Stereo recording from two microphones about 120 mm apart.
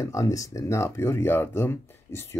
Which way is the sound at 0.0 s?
25° left (ahead or behind).